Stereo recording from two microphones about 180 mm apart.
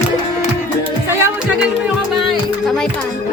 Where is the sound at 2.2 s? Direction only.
Centre (ahead or behind).